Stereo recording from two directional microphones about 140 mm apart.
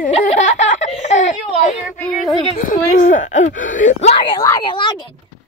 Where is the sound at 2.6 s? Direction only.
70° left (ahead or behind).